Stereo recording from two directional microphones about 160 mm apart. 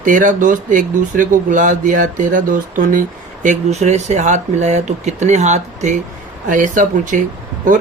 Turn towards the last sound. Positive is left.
turn(degrees=-55)  # may be behind; listen again after turning